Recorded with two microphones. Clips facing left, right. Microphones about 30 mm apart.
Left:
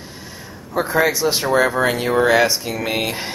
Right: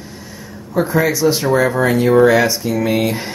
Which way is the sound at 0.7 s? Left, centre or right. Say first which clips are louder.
Right 2 dB; centre.